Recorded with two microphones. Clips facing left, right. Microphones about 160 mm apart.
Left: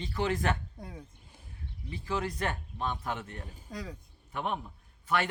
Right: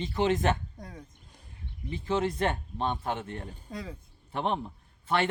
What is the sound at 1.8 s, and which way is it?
Speech, 25° right (ahead or behind).